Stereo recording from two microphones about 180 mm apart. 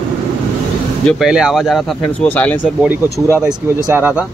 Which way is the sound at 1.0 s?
Centre (ahead or behind).